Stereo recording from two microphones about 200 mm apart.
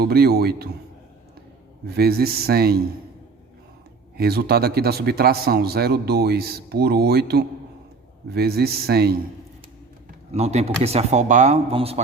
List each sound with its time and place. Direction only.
0.0 s a man's voice: 50° right (ahead or behind)
2.0 s a man's voice: 50° right (ahead or behind)
4.2 s a man's voice: 50° right (ahead or behind)
10.3 s speech: 30° right (ahead or behind)